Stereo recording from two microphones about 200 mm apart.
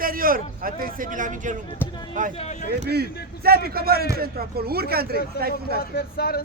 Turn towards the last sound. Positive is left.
turn(degrees=50)  # may be behind; listen again after turning